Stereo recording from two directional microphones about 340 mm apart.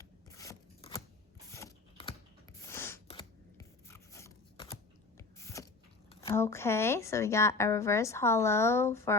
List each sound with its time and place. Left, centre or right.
0.0 s scissors: centre
6.2 s a woman's voice: centre